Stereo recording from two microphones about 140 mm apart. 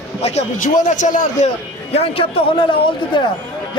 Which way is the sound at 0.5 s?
65° left (ahead or behind).